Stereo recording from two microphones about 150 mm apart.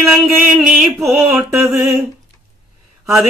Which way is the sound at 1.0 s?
15° right (ahead or behind).